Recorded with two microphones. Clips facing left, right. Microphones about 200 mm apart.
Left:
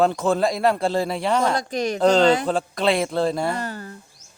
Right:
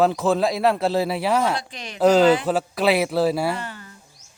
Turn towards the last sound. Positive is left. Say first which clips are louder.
# left 3 dB
turn(degrees=40)  # may be behind; listen again after turning